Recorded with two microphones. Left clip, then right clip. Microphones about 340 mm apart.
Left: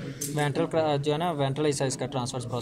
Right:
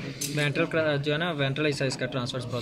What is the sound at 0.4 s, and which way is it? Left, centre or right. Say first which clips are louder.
A man's voice: even; left.